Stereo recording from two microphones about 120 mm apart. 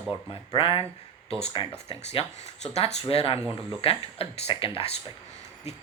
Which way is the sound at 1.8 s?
55° left (ahead or behind).